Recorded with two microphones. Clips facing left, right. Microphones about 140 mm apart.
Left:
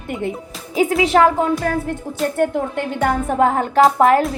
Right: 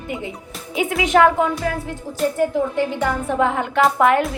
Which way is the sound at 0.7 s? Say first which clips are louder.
Left 2 dB; 35° left (ahead or behind).